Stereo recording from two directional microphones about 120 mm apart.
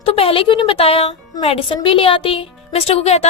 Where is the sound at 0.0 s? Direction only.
50° left (ahead or behind).